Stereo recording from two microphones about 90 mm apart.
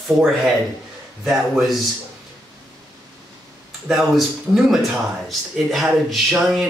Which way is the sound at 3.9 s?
5° right (ahead or behind).